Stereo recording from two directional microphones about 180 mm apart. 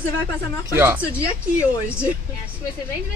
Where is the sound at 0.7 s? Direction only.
10° right (ahead or behind).